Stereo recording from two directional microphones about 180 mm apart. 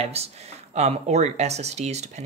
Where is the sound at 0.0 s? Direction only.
35° right (ahead or behind).